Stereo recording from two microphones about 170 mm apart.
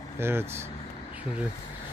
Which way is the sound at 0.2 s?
15° right (ahead or behind).